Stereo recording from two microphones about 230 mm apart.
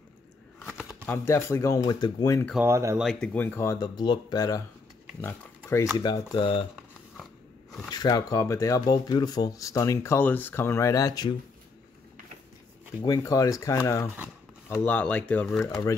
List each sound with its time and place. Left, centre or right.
0.7 s shuffling cards: centre
1.1 s speech: centre
2.6 s speech: centre
3.1 s speech: centre
5.9 s speech: centre
7.9 s speech: centre
13.0 s speech: centre